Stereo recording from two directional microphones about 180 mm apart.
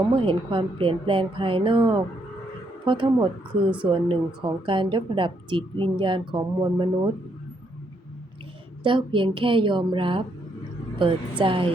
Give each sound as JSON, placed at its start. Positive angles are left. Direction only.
{"t": 0.2, "sound": "a woman's voice", "side_deg": -30}
{"t": 8.8, "sound": "a woman's voice", "side_deg": -25}